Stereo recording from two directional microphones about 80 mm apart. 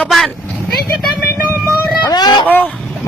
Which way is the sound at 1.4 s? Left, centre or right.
Right.